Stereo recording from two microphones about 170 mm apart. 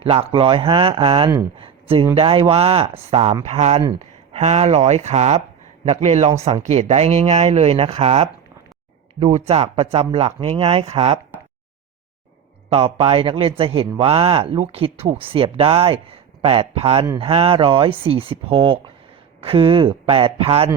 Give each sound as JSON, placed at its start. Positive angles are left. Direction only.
{"t": 0.0, "sound": "a man's voice", "side_deg": -35}
{"t": 12.7, "sound": "a man's voice", "side_deg": -35}